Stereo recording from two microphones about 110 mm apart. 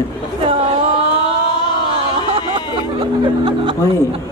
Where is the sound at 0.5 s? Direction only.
55° right (ahead or behind).